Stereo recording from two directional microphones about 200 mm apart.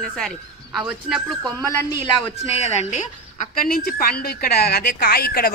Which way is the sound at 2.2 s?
30° left (ahead or behind).